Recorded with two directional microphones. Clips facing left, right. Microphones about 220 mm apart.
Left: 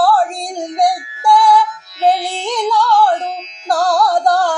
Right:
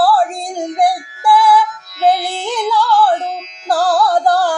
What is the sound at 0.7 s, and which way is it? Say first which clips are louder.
Music: even; 5° right (ahead or behind).